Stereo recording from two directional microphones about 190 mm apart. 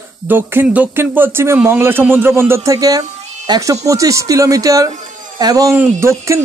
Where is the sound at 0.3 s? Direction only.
10° right (ahead or behind).